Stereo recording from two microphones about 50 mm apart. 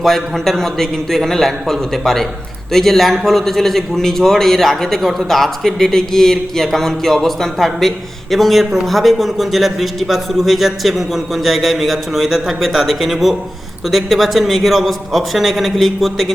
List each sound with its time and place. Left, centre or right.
0.0 s a man's voice: centre